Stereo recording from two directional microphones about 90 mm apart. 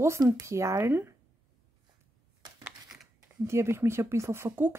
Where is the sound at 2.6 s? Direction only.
5° right (ahead or behind).